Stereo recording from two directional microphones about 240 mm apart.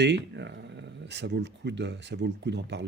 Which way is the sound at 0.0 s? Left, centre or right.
Right.